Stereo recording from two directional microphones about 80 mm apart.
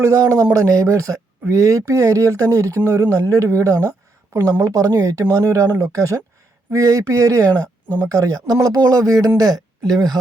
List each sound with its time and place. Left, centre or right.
0.0 s speech: right